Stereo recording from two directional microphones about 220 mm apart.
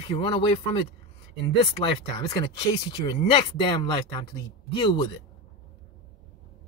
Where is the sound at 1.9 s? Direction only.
20° left (ahead or behind).